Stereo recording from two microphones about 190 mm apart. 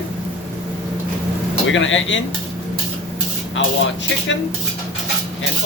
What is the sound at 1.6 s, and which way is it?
Speech, 80° left.